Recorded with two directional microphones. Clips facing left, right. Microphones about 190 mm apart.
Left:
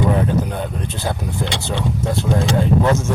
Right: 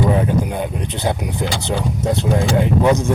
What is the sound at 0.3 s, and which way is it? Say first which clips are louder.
Speech: right 1 dB; 10° right (ahead or behind).